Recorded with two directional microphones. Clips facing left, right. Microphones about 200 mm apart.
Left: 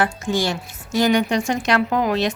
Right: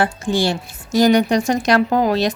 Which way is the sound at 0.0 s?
30° right (ahead or behind).